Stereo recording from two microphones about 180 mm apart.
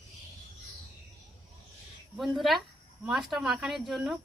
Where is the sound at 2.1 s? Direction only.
Centre (ahead or behind).